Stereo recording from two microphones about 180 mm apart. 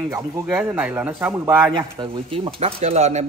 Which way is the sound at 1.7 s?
30° right (ahead or behind).